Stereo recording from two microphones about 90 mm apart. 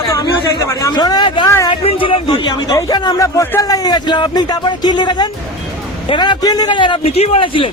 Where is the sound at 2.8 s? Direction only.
50° left (ahead or behind); by 7.7 s 75° left (ahead or behind).